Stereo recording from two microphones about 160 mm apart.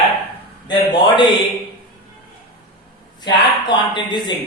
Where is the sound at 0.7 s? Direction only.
30° left (ahead or behind).